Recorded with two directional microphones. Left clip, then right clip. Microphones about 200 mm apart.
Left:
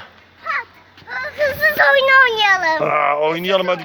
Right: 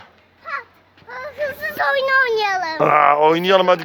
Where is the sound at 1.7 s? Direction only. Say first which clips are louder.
Left 4 dB; 40° right (ahead or behind).